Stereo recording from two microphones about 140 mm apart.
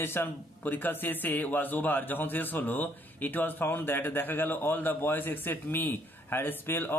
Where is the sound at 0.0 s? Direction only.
15° left (ahead or behind).